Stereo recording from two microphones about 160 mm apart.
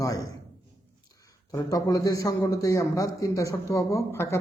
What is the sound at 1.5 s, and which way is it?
A man's voice, 20° left (ahead or behind).